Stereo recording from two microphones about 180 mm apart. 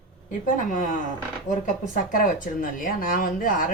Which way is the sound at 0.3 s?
45° left (ahead or behind).